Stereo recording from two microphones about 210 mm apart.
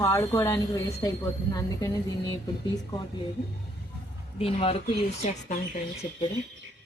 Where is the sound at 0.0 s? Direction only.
15° left (ahead or behind).